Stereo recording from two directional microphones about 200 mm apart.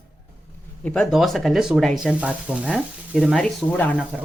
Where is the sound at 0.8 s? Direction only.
Centre (ahead or behind).